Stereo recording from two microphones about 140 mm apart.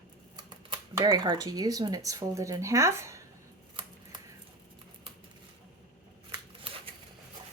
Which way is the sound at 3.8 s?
35° right (ahead or behind).